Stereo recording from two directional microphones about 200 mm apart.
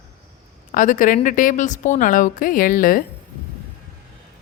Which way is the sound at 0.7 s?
40° left (ahead or behind).